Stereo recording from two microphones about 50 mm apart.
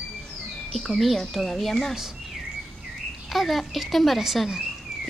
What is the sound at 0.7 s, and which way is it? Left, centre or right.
A woman's voice, centre.